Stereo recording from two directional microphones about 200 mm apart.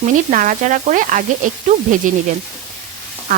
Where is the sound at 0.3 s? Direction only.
40° right (ahead or behind).